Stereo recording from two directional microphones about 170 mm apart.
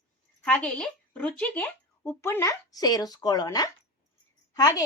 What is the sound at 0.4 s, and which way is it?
Speech, 5° left (ahead or behind).